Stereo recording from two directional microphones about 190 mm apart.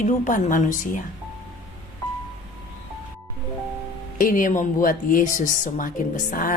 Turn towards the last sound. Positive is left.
turn(degrees=45)  # may be behind; listen again after turning